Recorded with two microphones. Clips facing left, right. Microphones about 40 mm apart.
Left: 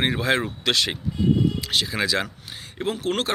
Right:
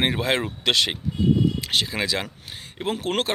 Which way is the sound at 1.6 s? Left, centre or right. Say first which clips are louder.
Even; right.